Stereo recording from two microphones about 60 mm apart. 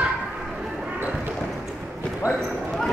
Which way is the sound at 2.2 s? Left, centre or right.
Right.